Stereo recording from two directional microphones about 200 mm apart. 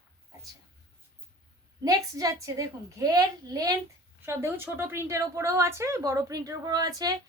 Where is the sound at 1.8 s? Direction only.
15° right (ahead or behind).